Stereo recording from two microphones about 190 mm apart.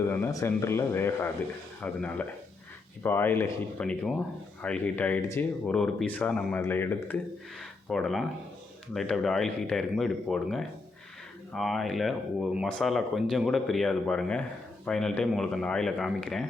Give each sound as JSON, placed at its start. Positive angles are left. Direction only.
{"t": 0.0, "sound": "speech", "side_deg": 15}